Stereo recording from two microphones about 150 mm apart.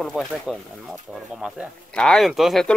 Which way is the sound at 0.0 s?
Centre (ahead or behind).